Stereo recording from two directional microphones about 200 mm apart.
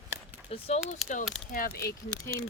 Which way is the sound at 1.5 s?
50° left (ahead or behind).